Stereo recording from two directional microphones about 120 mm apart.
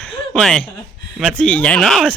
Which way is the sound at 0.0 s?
10° left (ahead or behind).